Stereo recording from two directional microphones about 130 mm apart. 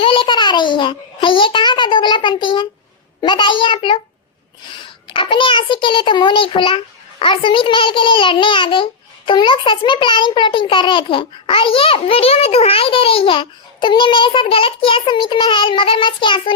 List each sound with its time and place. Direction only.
0.0 s a child's voice: 40° left (ahead or behind)